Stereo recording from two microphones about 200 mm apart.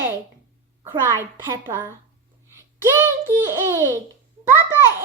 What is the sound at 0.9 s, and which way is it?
A woman's voice, 10° right (ahead or behind).